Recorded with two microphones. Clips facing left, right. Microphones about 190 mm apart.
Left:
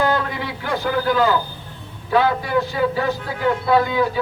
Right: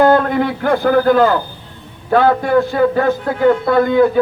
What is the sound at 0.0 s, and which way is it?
A man's voice, 50° right (ahead or behind).